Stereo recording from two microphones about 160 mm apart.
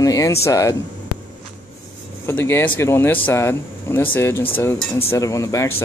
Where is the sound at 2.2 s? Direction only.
15° left (ahead or behind).